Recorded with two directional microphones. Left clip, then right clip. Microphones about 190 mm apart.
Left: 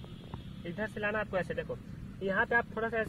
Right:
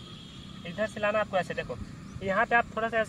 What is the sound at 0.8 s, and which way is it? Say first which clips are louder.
Speech: right 6 dB; 15° left (ahead or behind).